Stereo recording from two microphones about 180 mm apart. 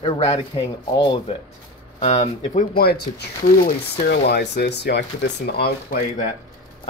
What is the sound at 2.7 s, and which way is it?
Speech, 60° left (ahead or behind).